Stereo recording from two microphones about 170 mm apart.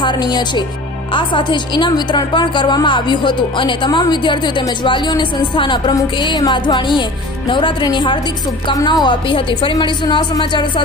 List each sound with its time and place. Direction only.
0.0 s a woman's voice: 25° left (ahead or behind)